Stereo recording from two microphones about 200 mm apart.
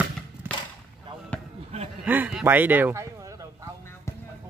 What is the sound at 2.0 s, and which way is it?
A man's voice, 10° right (ahead or behind).